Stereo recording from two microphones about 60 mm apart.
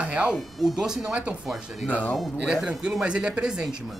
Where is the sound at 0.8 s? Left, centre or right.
Centre.